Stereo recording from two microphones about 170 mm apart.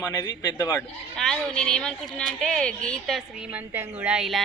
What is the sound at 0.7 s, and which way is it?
A woman's voice, 5° left (ahead or behind).